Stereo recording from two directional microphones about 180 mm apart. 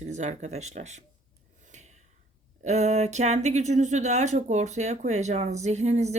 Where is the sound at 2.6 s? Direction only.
40° right (ahead or behind).